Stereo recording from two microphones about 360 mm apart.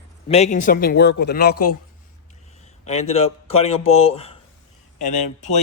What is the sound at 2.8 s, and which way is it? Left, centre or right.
Speech, centre.